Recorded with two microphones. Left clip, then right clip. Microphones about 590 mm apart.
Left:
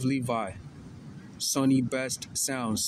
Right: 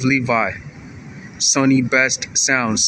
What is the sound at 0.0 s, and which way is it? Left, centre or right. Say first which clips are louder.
Speech: right 13 dB; left.